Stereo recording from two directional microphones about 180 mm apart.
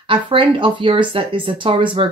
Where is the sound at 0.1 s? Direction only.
30° right (ahead or behind).